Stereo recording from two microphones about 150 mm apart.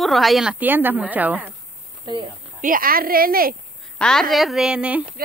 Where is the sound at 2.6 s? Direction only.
70° right (ahead or behind).